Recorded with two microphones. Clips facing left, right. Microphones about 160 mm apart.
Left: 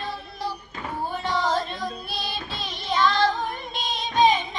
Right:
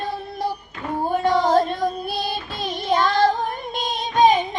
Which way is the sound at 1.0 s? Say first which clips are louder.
Right 7 dB; 50° right (ahead or behind).